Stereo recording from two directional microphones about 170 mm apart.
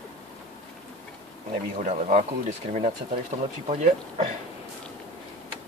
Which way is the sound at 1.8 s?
50° right (ahead or behind).